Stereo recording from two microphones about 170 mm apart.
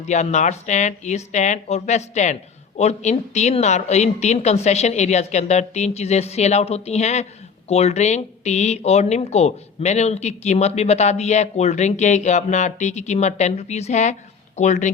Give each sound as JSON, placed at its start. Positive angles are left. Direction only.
{"t": 0.0, "sound": "speech", "side_deg": 40}